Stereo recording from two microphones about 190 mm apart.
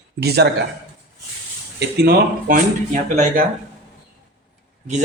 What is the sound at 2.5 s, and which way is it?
Speech, 40° right (ahead or behind).